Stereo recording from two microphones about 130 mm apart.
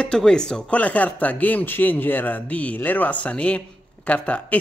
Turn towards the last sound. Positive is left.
turn(degrees=10)  # may be behind; listen again after turning